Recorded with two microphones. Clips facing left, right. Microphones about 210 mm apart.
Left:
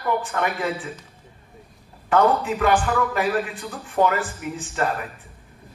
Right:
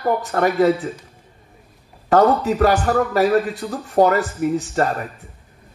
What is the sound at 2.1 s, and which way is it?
A man's voice, 40° right (ahead or behind).